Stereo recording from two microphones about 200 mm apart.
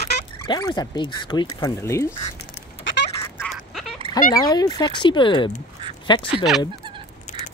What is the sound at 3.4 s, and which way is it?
Duck, centre (ahead or behind).